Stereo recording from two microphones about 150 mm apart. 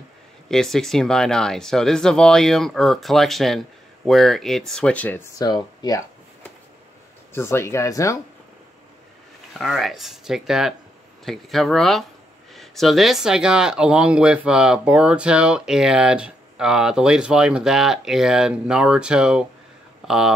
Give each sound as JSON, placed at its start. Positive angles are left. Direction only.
{"t": 0.5, "sound": "speech", "side_deg": 5}
{"t": 5.4, "sound": "speech", "side_deg": 25}
{"t": 7.3, "sound": "speech", "side_deg": 15}
{"t": 9.5, "sound": "speech", "side_deg": 0}